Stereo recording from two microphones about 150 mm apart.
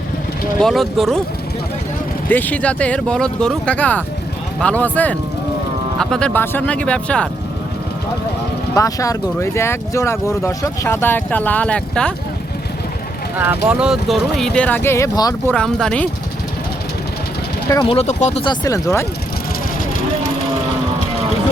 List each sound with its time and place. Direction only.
0.6 s speech: centre (ahead or behind)
2.3 s speech: 10° left (ahead or behind)
8.7 s speech: 20° left (ahead or behind)
13.4 s speech: 10° right (ahead or behind); by 15.4 s 25° left (ahead or behind)
15.4 s speech: 5° left (ahead or behind)
17.8 s speech: 45° left (ahead or behind)
18.4 s speech: 20° left (ahead or behind)